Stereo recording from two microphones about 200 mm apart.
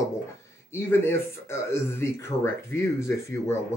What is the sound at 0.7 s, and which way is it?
Speech, 15° left (ahead or behind).